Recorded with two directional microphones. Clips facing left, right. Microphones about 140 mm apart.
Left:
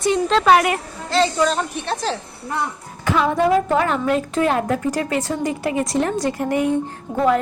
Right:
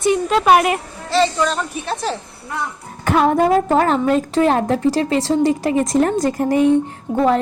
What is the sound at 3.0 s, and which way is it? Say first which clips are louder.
A woman's voice: right 3 dB; 50° right (ahead or behind).